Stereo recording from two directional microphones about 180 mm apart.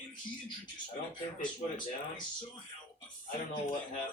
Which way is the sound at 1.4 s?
25° left (ahead or behind).